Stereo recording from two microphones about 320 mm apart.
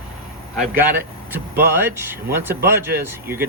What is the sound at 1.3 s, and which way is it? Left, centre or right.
Speech, centre.